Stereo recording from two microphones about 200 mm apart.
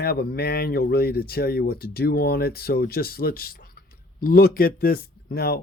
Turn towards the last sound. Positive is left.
turn(degrees=50)  # may be behind; listen again after turning